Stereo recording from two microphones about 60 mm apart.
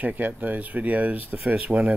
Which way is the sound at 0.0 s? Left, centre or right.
Right.